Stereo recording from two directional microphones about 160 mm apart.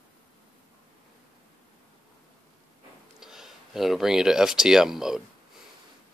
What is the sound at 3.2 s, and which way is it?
Speech, 5° right (ahead or behind).